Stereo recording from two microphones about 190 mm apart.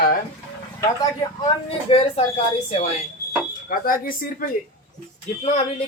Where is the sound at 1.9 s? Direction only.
30° left (ahead or behind).